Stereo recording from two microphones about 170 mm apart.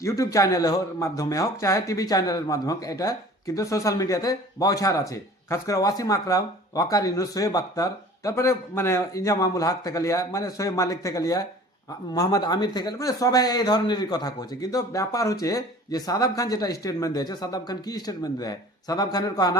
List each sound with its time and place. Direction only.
0.0 s a man's voice: 20° left (ahead or behind)